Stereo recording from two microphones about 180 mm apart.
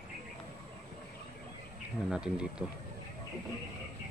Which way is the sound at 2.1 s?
5° right (ahead or behind).